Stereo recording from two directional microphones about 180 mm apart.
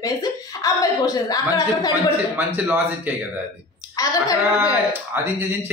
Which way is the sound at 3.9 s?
20° left (ahead or behind).